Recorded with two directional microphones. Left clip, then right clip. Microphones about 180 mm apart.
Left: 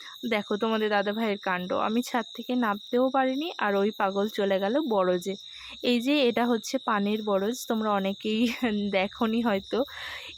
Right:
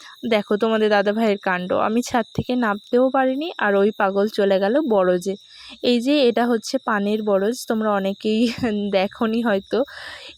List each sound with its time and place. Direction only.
0.2 s speech: 30° right (ahead or behind)